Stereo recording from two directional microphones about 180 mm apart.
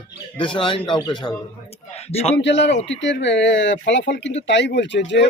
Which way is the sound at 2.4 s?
75° left (ahead or behind).